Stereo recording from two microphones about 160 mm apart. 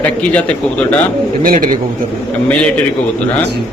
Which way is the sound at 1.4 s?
60° right (ahead or behind).